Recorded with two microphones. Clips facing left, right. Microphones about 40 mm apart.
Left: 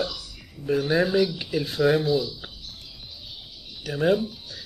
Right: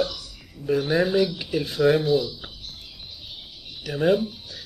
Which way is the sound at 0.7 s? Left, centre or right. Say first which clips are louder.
Right 1 dB; centre.